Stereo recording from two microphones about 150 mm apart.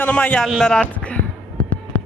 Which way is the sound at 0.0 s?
10° left (ahead or behind).